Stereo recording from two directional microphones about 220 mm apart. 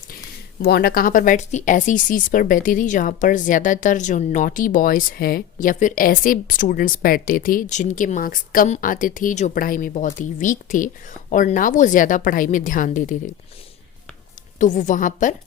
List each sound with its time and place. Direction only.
0.6 s speech: 45° left (ahead or behind)
14.6 s speech: 35° left (ahead or behind)